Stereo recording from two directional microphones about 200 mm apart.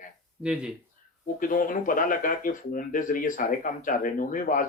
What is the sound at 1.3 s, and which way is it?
Speech, 45° left (ahead or behind).